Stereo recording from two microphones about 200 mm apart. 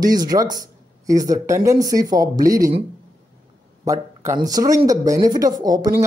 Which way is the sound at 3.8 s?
15° right (ahead or behind).